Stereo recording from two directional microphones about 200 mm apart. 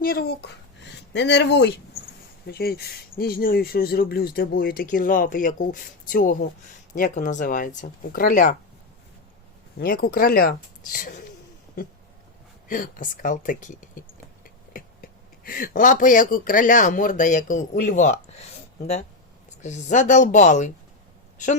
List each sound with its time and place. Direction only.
0.0 s speech: 50° left (ahead or behind)
9.7 s speech: 45° left (ahead or behind)
12.6 s speech: 45° left (ahead or behind)
19.5 s a woman's voice: 35° left (ahead or behind)